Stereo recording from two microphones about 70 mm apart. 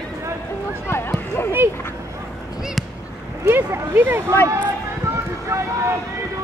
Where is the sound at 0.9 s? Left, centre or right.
Left.